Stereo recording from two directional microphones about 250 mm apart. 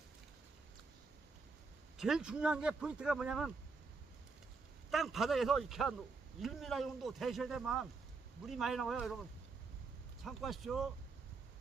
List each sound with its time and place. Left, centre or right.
2.0 s speech: centre
4.9 s speech: centre
10.2 s speech: centre